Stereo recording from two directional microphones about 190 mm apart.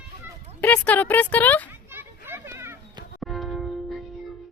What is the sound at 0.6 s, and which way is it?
Speech, 10° left (ahead or behind).